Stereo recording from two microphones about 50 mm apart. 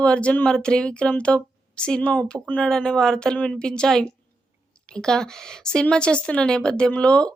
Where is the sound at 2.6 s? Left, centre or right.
Centre.